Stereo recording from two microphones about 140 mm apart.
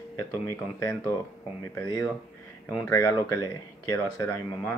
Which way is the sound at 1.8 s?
20° left (ahead or behind).